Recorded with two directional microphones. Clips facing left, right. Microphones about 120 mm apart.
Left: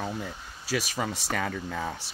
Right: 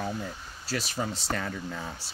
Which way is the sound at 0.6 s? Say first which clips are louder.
Left 2 dB; 90° left.